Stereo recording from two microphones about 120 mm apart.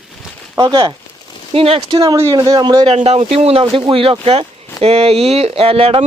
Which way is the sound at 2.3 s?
40° right (ahead or behind).